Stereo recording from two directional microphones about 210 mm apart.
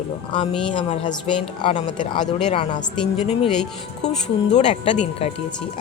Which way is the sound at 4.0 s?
55° left (ahead or behind).